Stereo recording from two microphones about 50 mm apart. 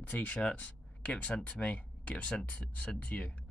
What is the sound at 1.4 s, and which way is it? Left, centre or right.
Speech, left.